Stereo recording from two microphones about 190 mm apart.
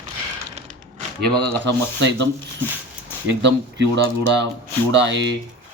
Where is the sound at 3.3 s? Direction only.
65° right (ahead or behind).